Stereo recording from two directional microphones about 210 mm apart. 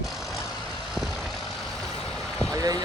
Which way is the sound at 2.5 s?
15° right (ahead or behind).